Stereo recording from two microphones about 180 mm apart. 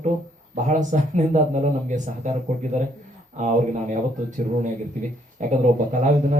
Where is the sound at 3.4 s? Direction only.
45° right (ahead or behind).